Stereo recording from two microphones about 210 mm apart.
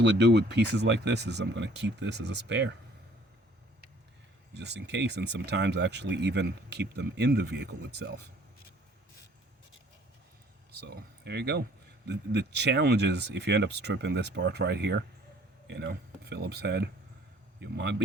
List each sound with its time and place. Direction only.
0.0 s speech: 55° right (ahead or behind)
4.5 s speech: 55° right (ahead or behind)
10.7 s speech: 50° right (ahead or behind)